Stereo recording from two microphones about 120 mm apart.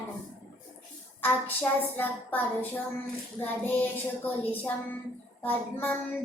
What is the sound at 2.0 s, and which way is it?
Child singing, 15° left (ahead or behind).